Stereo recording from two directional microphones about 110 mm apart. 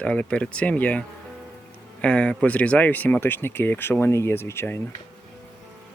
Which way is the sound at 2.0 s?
10° left (ahead or behind).